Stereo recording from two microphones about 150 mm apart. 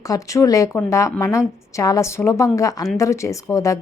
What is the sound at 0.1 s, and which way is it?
A woman's voice, 20° left (ahead or behind).